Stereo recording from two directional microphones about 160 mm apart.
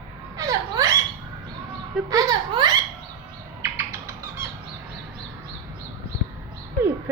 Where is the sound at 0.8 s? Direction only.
20° right (ahead or behind).